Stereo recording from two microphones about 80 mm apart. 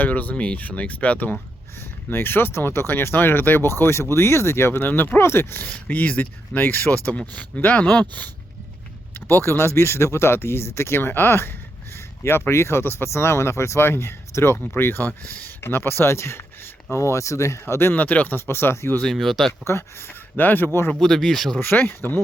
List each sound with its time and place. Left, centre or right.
0.0 s speech: left
5.6 s speech: centre
19.0 s speech: centre
19.6 s speech: left
21.0 s speech: centre
21.6 s speech: left